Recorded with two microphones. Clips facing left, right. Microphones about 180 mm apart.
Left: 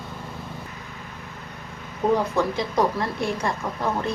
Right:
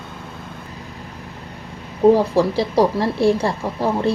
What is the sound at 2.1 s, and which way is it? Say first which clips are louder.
A woman's voice: right 6 dB; 30° right (ahead or behind).